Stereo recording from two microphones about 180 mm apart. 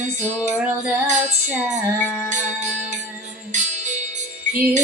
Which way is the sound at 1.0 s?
40° right (ahead or behind).